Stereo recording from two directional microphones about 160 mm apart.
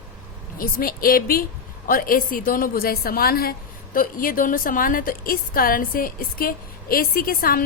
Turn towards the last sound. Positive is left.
turn(degrees=65)  # may be behind; listen again after turning